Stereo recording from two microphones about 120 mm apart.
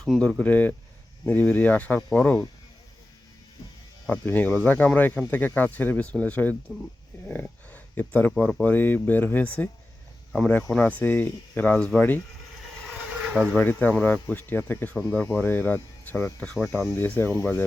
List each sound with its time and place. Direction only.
0.0 s speech: 5° left (ahead or behind)
4.0 s speech: 15° left (ahead or behind)
13.6 s speech: 15° left (ahead or behind)